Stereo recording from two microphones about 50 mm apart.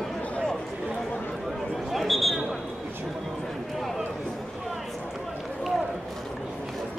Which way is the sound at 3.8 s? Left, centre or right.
Centre.